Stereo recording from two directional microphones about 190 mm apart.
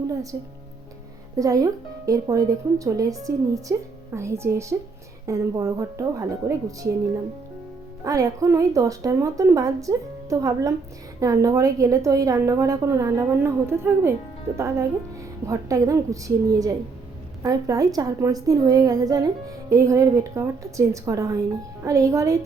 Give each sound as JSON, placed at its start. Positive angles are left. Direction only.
{"t": 0.1, "sound": "a woman's voice", "side_deg": -15}
{"t": 1.4, "sound": "a woman's voice", "side_deg": -15}